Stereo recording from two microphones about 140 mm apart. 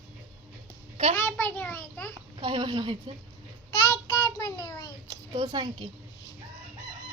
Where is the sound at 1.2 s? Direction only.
15° left (ahead or behind).